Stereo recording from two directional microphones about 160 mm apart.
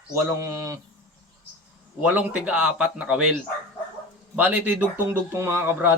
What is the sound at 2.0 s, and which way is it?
Speech, 10° right (ahead or behind).